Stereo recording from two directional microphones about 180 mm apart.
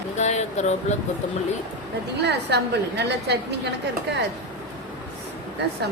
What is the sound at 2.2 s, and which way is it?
A woman's voice, 70° right (ahead or behind).